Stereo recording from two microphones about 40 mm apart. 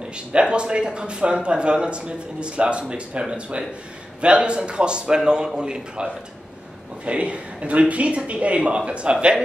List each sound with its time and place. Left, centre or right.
0.1 s speech: right
7.1 s a man's voice: right